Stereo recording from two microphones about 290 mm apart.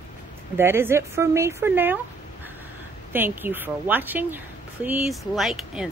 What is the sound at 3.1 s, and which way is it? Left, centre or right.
Speech, centre.